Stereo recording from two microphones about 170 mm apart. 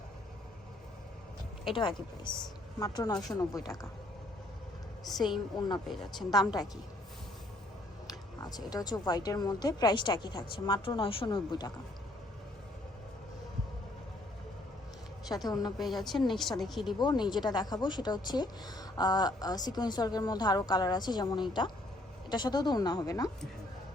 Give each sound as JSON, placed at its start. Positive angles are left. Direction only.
{"t": 1.7, "sound": "a woman's voice", "side_deg": 30}
{"t": 5.5, "sound": "a woman's voice", "side_deg": 25}
{"t": 5.9, "sound": "speech", "side_deg": 0}
{"t": 6.3, "sound": "a woman's voice", "side_deg": 25}
{"t": 8.0, "sound": "a woman's voice", "side_deg": 20}
{"t": 15.4, "sound": "a woman's voice", "side_deg": 25}
{"t": 15.8, "sound": "speech", "side_deg": 0}
{"t": 17.0, "sound": "a woman's voice", "side_deg": 25}